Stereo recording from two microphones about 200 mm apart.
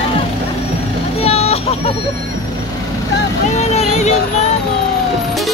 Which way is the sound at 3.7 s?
35° left (ahead or behind).